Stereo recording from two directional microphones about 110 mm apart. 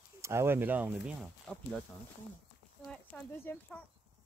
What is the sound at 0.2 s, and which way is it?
Speech, 25° right (ahead or behind).